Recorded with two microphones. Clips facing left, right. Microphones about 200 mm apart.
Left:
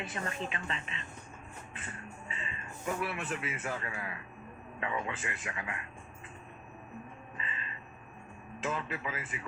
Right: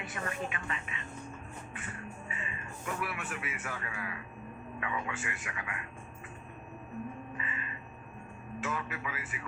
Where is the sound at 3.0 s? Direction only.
25° left (ahead or behind).